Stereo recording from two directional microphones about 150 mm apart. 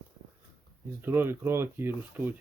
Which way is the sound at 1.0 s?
15° right (ahead or behind).